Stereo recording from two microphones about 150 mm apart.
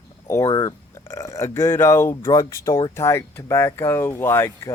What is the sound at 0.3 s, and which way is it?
Speech, 20° left (ahead or behind).